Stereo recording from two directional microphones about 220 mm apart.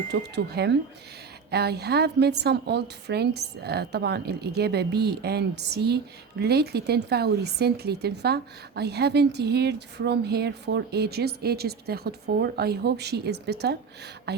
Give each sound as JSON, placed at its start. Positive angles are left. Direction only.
{"t": 0.1, "sound": "speech", "side_deg": -50}